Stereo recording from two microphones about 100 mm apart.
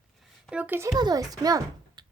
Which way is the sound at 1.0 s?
40° right (ahead or behind).